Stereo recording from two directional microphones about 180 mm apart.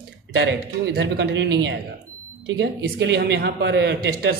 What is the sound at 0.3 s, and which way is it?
A man's voice, 75° right (ahead or behind).